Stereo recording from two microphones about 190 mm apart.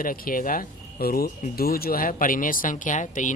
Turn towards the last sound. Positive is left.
turn(degrees=40)  # may be behind; listen again after turning